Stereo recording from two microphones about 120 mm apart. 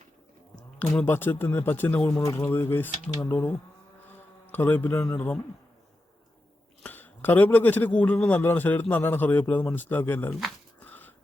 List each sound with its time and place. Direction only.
0.5 s a man's voice: 10° left (ahead or behind)
6.8 s a man's voice: 15° left (ahead or behind)
10.8 s a sound: 15° left (ahead or behind)